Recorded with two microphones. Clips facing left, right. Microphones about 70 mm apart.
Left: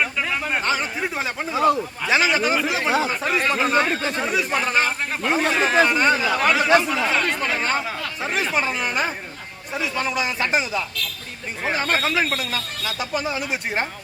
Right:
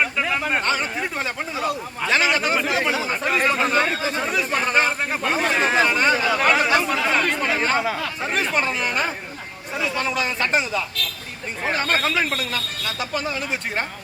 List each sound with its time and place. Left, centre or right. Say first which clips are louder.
0.0 s a sound: right 1 dB; centre
1.5 s speech: left 8 dB; left
2.0 s speech: even; centre